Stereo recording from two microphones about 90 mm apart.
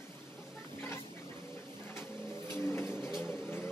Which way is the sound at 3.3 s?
25° left (ahead or behind).